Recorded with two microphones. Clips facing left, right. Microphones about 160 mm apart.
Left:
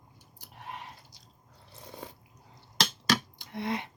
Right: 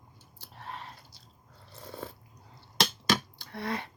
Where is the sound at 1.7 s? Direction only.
15° left (ahead or behind).